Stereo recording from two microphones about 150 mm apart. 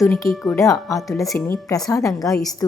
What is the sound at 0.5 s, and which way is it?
A woman's voice, 20° left (ahead or behind).